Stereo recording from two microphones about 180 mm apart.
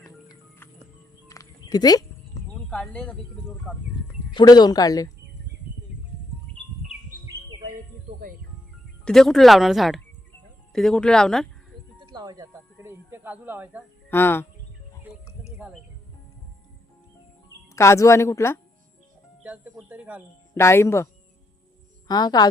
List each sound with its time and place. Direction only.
1.3 s a sound: 20° left (ahead or behind)
2.6 s speech: 5° left (ahead or behind)
4.4 s speech: 25° left (ahead or behind)
9.0 s speech: centre (ahead or behind)
11.9 s speech: 25° right (ahead or behind)
14.1 s speech: 10° left (ahead or behind)
15.4 s bird: 5° right (ahead or behind)
17.7 s speech: 15° left (ahead or behind)
19.4 s music: 10° right (ahead or behind)
20.6 s a woman's voice: 15° left (ahead or behind)